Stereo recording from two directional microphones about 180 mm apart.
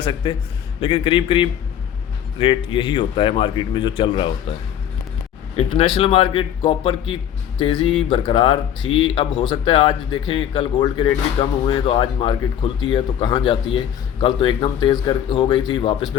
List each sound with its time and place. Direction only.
0.0 s speech: 25° left (ahead or behind)
5.5 s a man's voice: 30° left (ahead or behind)